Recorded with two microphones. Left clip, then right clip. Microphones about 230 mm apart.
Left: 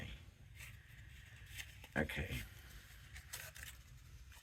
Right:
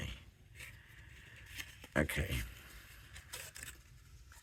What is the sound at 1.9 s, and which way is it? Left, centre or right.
Speech, right.